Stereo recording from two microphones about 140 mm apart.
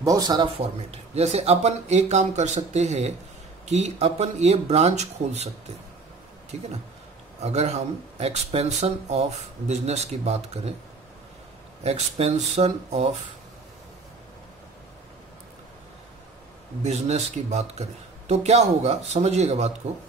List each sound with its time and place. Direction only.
0.0 s speech: 25° right (ahead or behind)
0.6 s speech: 50° right (ahead or behind)
6.5 s speech: 50° right (ahead or behind)
11.8 s speech: 50° right (ahead or behind)
16.8 s speech: 50° right (ahead or behind)